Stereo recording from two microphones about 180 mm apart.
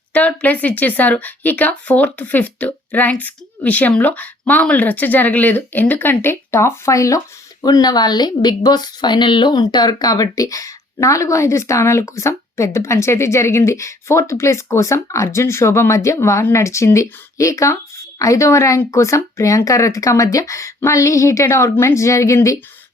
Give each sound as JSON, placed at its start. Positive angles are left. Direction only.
{"t": 0.1, "sound": "a woman's voice", "side_deg": 10}